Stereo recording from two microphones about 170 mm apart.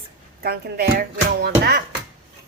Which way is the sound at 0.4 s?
65° right (ahead or behind).